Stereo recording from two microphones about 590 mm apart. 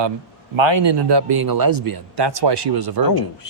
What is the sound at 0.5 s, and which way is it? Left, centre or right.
Speech, right.